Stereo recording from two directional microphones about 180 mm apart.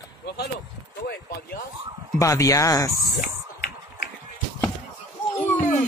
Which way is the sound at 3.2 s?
55° left (ahead or behind).